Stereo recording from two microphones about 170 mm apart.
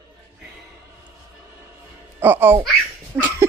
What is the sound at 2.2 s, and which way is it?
Babbling, 10° right (ahead or behind).